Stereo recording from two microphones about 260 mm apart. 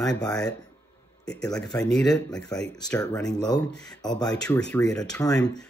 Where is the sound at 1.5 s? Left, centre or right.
Centre.